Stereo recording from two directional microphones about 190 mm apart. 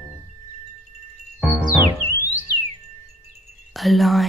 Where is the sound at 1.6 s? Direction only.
10° right (ahead or behind).